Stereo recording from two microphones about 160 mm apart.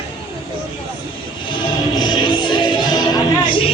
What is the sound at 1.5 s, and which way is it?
Music, 30° left (ahead or behind).